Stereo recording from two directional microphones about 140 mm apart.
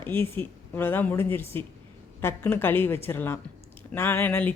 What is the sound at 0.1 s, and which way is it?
Speech, 15° left (ahead or behind).